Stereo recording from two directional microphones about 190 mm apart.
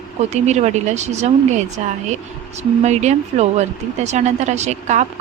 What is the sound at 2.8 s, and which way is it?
Speech, 35° right (ahead or behind).